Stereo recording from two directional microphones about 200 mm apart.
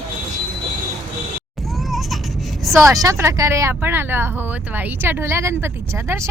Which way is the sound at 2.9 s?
15° right (ahead or behind).